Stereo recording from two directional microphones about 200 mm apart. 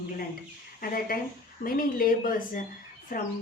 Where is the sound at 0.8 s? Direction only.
45° left (ahead or behind).